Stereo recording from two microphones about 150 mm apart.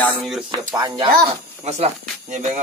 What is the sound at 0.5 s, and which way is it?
Speech, 30° right (ahead or behind).